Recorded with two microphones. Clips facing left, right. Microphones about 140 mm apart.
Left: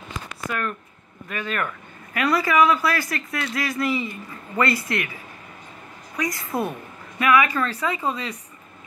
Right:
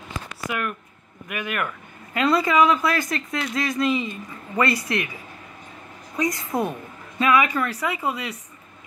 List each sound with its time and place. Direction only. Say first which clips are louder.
0.5 s speech: even; 15° right (ahead or behind)
6.1 s speech: right 2 dB; 20° right (ahead or behind)